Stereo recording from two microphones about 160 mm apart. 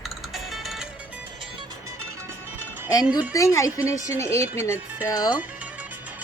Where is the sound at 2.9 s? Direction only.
25° left (ahead or behind).